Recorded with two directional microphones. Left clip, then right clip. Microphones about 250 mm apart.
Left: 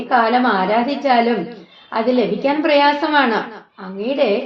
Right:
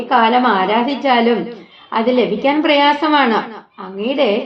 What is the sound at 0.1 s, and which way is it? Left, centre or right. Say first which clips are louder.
A woman's voice: right 2 dB; right.